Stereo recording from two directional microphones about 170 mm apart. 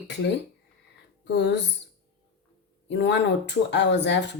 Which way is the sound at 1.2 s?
90° left.